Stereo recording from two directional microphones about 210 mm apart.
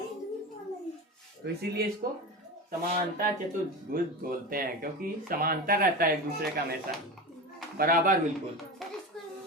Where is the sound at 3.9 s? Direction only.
45° right (ahead or behind).